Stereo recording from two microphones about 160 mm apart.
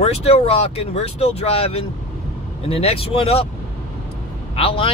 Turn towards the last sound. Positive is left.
turn(degrees=35)  # may be behind; listen again after turning